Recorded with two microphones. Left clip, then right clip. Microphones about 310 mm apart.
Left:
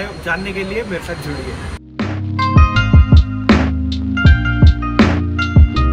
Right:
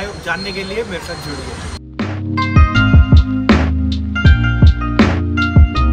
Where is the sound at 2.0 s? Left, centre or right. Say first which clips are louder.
Left 1 dB; right.